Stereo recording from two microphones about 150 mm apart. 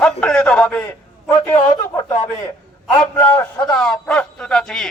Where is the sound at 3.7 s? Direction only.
5° left (ahead or behind).